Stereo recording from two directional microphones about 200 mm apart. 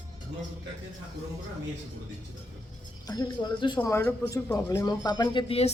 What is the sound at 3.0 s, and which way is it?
Speech, 20° left (ahead or behind).